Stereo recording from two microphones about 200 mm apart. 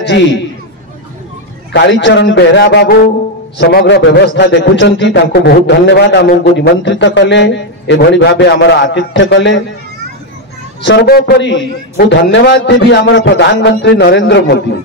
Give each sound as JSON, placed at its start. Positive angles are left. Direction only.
{"t": 1.7, "sound": "a man's voice", "side_deg": 60}
{"t": 10.9, "sound": "a man's voice", "side_deg": 55}